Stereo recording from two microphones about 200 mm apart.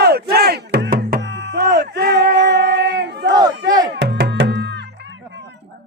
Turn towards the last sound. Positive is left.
turn(degrees=-60)  # may be behind; listen again after turning